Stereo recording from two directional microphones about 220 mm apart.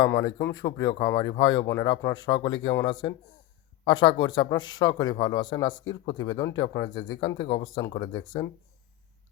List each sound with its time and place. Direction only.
0.0 s a man's voice: 15° left (ahead or behind)